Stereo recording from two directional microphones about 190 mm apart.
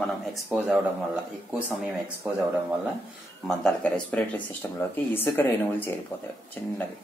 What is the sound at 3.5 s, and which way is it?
Speech, 5° left (ahead or behind).